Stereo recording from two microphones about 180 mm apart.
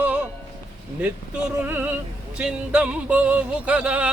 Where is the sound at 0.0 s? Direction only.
10° right (ahead or behind).